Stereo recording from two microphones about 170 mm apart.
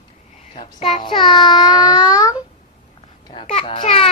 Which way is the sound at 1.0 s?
30° left (ahead or behind).